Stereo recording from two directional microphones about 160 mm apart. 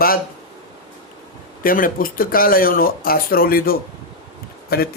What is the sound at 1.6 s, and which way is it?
Speech, 60° left (ahead or behind).